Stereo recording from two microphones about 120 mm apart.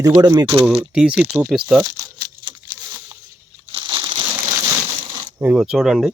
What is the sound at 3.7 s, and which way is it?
Crushing, 40° right (ahead or behind).